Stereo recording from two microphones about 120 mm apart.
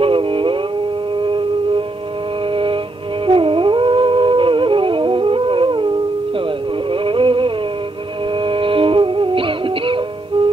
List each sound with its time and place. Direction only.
0.0 s a sound: 45° right (ahead or behind)
2.5 s music: 45° right (ahead or behind)
6.9 s music: 45° right (ahead or behind)